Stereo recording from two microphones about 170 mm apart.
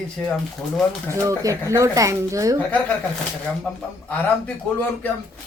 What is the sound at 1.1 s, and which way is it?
Speech, 15° right (ahead or behind).